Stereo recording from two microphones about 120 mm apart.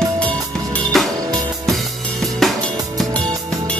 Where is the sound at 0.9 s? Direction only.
Centre (ahead or behind).